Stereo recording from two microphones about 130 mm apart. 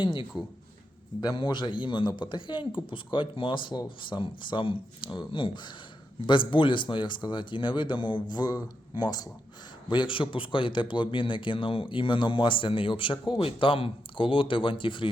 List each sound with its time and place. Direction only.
0.0 s a man's voice: 40° left (ahead or behind)